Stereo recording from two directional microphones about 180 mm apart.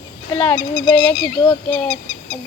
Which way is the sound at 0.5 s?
25° left (ahead or behind).